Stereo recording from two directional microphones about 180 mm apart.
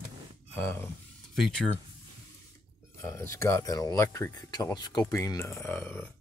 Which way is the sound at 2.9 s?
15° left (ahead or behind).